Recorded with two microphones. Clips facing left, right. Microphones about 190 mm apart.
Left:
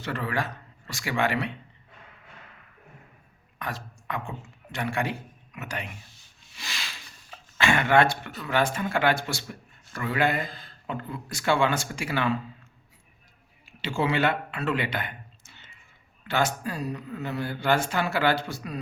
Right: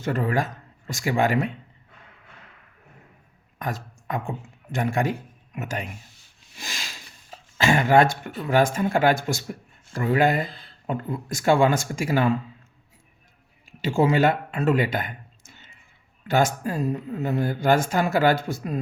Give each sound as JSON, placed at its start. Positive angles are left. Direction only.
{"t": 0.0, "sound": "speech", "side_deg": -45}
{"t": 3.6, "sound": "a man's voice", "side_deg": -45}
{"t": 6.6, "sound": "sniff", "side_deg": -45}
{"t": 8.4, "sound": "speech", "side_deg": -40}
{"t": 10.4, "sound": "speech", "side_deg": 45}
{"t": 10.8, "sound": "speech", "side_deg": -45}
{"t": 13.8, "sound": "speech", "side_deg": -45}